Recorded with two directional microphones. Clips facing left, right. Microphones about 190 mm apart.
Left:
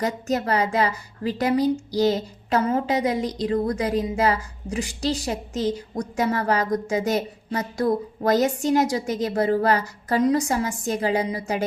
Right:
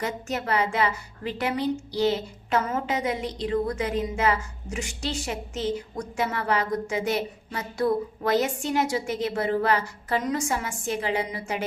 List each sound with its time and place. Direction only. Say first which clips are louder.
0.0 s a woman's voice: left 5 dB; 40° left (ahead or behind)